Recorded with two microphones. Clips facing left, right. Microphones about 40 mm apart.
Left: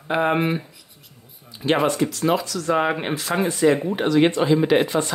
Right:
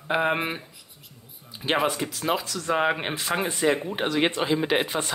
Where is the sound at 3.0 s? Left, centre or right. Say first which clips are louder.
Left 4 dB; right.